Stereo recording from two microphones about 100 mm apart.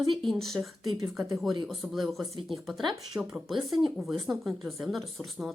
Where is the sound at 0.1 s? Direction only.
Centre (ahead or behind).